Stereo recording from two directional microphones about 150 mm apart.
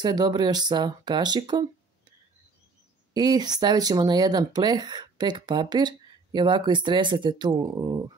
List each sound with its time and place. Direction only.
0.0 s speech: 30° right (ahead or behind)
3.1 s speech: 25° right (ahead or behind)